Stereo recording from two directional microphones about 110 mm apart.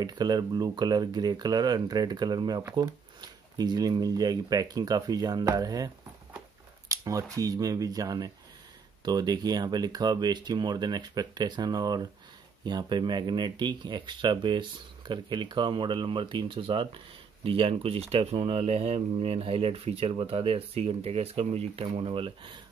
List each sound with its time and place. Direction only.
0.0 s speech: 40° right (ahead or behind)
6.9 s speech: 30° right (ahead or behind); by 21.8 s 70° right (ahead or behind)
21.8 s speech: 55° right (ahead or behind)